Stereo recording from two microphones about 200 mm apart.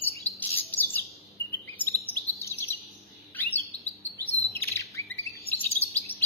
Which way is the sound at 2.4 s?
15° left (ahead or behind).